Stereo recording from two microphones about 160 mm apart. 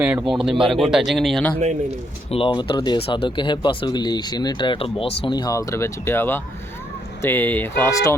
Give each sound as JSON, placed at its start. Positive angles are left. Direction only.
{"t": 0.0, "sound": "a man's voice", "side_deg": -10}
{"t": 2.3, "sound": "speech", "side_deg": 35}